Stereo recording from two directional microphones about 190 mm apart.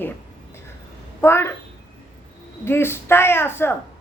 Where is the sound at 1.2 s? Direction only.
15° left (ahead or behind).